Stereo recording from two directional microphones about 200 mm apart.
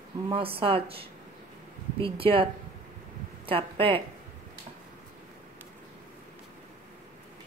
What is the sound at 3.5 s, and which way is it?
Speech, 25° right (ahead or behind).